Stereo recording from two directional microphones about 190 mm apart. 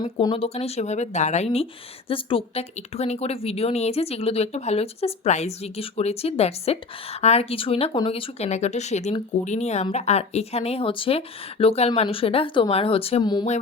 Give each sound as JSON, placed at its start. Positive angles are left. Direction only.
{"t": 0.0, "sound": "speech", "side_deg": 25}